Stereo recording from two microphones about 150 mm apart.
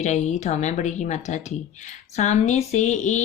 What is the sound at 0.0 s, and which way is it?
Speech, 50° left (ahead or behind).